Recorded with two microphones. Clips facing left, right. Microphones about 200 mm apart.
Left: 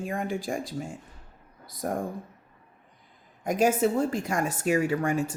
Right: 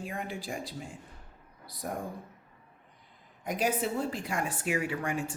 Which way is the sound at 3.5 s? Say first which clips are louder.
Left 7 dB; 45° left (ahead or behind).